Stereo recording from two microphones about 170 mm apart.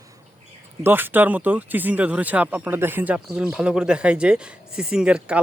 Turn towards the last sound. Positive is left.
turn(degrees=-5)  # may be behind; listen again after turning